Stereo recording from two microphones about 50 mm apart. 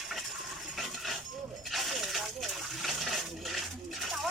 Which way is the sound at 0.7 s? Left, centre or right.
Centre.